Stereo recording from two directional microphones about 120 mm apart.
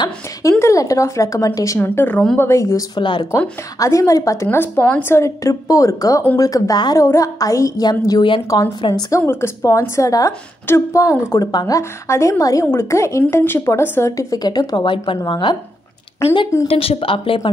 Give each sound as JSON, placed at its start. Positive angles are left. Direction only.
{"t": 0.4, "sound": "a woman's voice", "side_deg": 25}
{"t": 1.8, "sound": "a woman's voice", "side_deg": 15}
{"t": 3.0, "sound": "speech", "side_deg": 40}
{"t": 3.3, "sound": "a woman's voice", "side_deg": 25}
{"t": 9.2, "sound": "a woman's voice", "side_deg": 20}
{"t": 16.6, "sound": "speech", "side_deg": 55}